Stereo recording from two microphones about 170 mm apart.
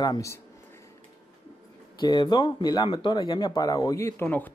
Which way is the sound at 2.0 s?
25° left (ahead or behind).